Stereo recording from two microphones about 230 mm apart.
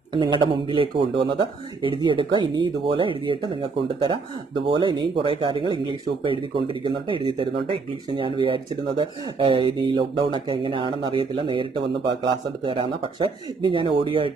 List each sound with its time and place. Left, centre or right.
0.1 s speech: centre